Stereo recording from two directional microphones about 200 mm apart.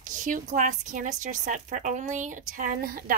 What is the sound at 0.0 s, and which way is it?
Speech, 40° right (ahead or behind).